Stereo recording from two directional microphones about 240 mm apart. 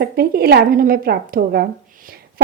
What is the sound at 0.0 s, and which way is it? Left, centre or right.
Speech, right.